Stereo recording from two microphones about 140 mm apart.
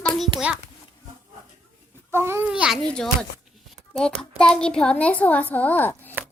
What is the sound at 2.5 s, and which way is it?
Speech, 5° right (ahead or behind).